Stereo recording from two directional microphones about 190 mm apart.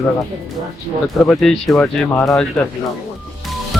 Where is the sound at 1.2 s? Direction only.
5° left (ahead or behind).